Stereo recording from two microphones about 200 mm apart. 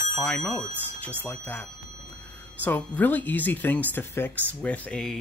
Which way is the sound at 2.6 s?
10° left (ahead or behind).